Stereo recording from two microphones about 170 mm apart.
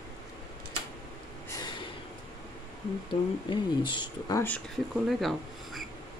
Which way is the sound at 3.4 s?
25° left (ahead or behind).